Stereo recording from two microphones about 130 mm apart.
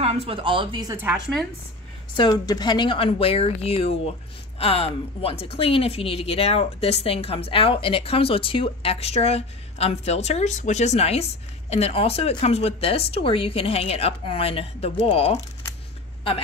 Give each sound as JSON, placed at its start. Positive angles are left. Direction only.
{"t": 0.0, "sound": "speech", "side_deg": -50}
{"t": 2.1, "sound": "a woman's voice", "side_deg": 30}